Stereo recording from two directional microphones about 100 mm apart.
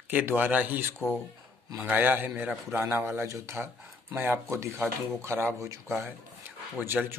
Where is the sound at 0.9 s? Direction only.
5° left (ahead or behind).